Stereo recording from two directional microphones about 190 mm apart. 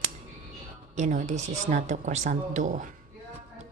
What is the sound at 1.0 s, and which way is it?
A woman's voice, 40° right (ahead or behind).